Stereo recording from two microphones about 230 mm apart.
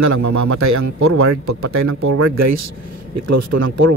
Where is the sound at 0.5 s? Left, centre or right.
Right.